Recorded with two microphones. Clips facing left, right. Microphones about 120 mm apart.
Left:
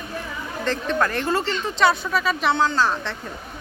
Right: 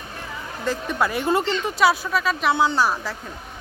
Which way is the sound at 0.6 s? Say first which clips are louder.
Left 1 dB; 10° right (ahead or behind).